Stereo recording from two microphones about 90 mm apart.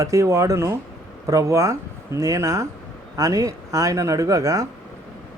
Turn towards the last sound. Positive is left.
turn(degrees=-40)  # may be behind; listen again after turning